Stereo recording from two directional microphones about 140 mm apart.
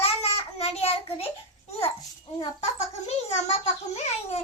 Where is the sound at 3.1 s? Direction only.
50° left (ahead or behind).